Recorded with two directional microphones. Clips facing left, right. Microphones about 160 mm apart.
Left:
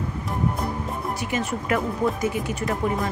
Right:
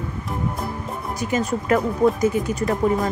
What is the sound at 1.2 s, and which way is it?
Speech, 40° right (ahead or behind).